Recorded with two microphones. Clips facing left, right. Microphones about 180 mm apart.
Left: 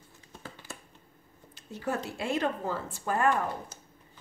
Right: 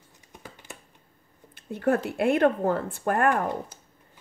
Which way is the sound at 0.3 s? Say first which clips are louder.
Even; 15° right (ahead or behind).